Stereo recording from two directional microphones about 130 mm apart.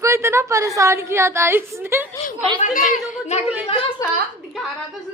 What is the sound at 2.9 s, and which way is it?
Speech, 60° left (ahead or behind).